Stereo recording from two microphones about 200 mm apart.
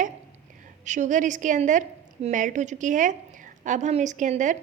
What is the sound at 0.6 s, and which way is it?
A woman's voice, 40° right (ahead or behind).